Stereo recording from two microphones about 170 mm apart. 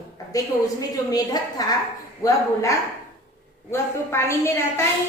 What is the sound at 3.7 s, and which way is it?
Speech, 15° left (ahead or behind).